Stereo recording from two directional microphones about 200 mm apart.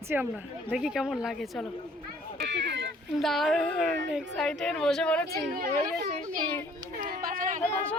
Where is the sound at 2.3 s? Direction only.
60° right (ahead or behind).